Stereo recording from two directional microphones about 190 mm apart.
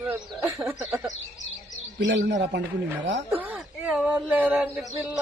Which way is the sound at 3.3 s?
10° right (ahead or behind).